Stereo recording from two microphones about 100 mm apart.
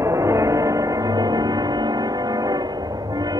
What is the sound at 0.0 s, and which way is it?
Music, 30° right (ahead or behind).